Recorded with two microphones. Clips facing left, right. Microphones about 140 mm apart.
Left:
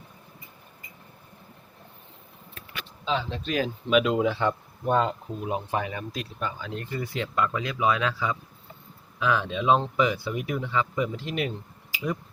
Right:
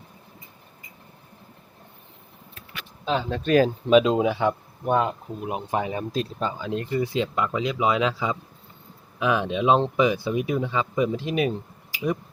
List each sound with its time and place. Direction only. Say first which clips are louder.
3.0 s speech: right 3 dB; 50° right (ahead or behind)
3.8 s speech: right 4 dB; 25° right (ahead or behind)
5.9 s speech: right 7 dB; 30° right (ahead or behind)